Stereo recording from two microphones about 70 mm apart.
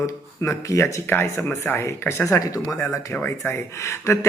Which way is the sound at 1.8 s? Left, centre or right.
Left.